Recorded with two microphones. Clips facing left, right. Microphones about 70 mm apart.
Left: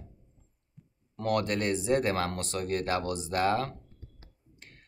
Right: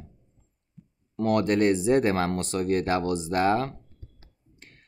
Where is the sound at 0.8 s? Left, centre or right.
Centre.